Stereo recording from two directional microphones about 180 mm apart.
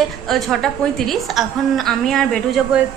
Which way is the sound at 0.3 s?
Centre (ahead or behind).